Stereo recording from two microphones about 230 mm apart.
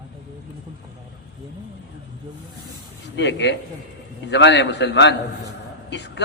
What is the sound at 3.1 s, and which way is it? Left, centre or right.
A man's voice, left.